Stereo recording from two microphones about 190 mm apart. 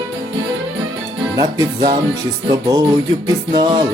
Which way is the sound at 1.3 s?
20° right (ahead or behind).